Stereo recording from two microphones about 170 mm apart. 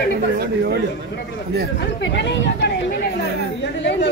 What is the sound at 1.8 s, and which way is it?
Speech, 90° left.